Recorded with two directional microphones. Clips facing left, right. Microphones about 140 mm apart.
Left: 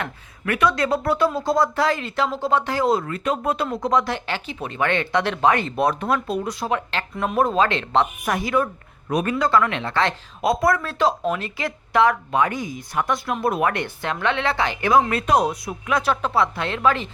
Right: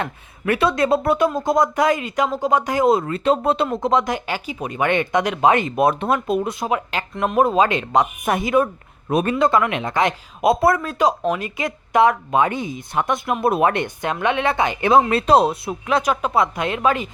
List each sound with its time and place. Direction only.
0.0 s speech: 25° right (ahead or behind)
6.7 s a woman's voice: 10° right (ahead or behind)
10.9 s speech: 15° right (ahead or behind)